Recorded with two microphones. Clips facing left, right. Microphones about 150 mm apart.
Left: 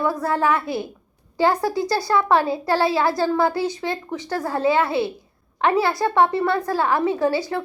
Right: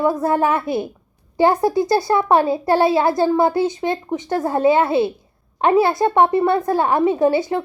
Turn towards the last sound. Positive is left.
turn(degrees=-20)  # may be behind; listen again after turning